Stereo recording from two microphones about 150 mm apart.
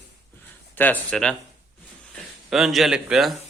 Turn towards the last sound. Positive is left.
turn(degrees=-5)  # may be behind; listen again after turning